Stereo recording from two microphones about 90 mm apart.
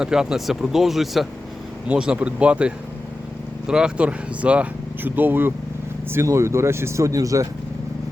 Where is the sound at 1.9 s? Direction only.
10° right (ahead or behind); by 7.4 s 35° right (ahead or behind).